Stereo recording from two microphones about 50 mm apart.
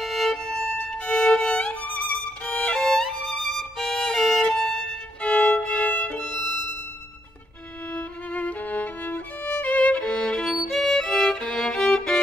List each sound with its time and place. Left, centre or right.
0.0 s violin: centre
0.5 s violin: centre
2.8 s violin: centre
5.2 s violin: left
7.9 s violin: left
10.0 s music: centre